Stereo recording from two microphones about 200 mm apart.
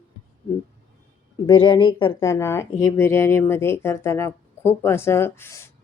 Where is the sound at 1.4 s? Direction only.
25° left (ahead or behind).